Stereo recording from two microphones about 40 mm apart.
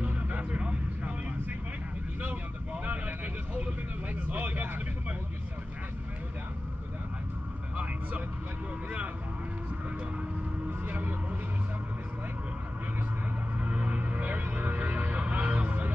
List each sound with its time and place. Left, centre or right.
0.0 s vehicle: right
0.5 s vehicle: right
2.2 s vehicle: right
7.7 s vehicle: right
10.9 s a sound: right
13.6 s music: right